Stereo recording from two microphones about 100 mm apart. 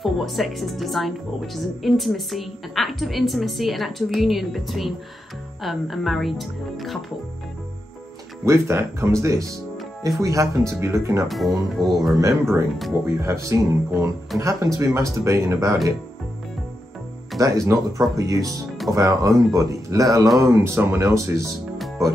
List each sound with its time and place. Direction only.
0.0 s a woman's voice: centre (ahead or behind)
8.5 s speech: 25° right (ahead or behind)
11.2 s a woman's voice: centre (ahead or behind)
12.2 s speech: 30° right (ahead or behind)
17.4 s speech: 35° right (ahead or behind)
21.7 s music: centre (ahead or behind)